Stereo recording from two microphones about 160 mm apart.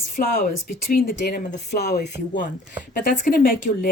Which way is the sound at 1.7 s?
90° left.